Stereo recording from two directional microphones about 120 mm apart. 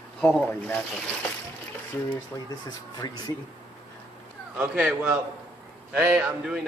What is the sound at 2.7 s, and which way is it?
Speech, 35° left (ahead or behind).